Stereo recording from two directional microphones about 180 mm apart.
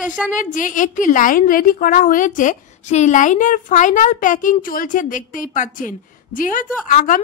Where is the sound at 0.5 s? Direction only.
45° left (ahead or behind).